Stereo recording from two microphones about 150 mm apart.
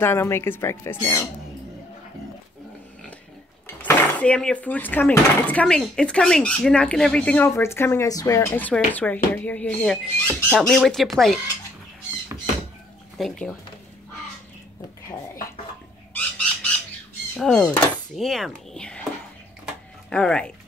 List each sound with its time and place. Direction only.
0.0 s speech: 15° left (ahead or behind)
3.6 s speech: 15° left (ahead or behind)
10.7 s speech: centre (ahead or behind)
13.2 s speech: 5° left (ahead or behind)
16.1 s chicken: 5° left (ahead or behind)
17.4 s speech: 5° left (ahead or behind)
20.1 s speech: 5° left (ahead or behind)